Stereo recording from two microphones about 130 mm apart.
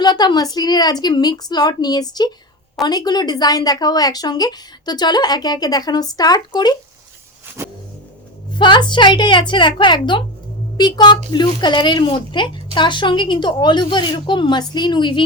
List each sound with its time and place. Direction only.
0.0 s speech: 35° left (ahead or behind)
7.6 s vehicle: 20° right (ahead or behind)
8.5 s speech: 35° left (ahead or behind)